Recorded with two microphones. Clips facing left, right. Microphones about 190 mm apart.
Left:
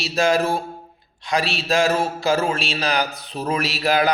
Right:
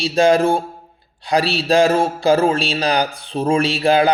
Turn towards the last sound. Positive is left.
turn(degrees=-30)  # may be behind; listen again after turning